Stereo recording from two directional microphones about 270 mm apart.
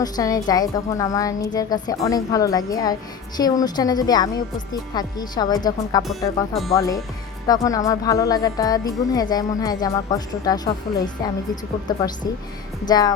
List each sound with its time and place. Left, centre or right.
0.0 s speech: centre
6.0 s speech: centre
6.7 s speech: centre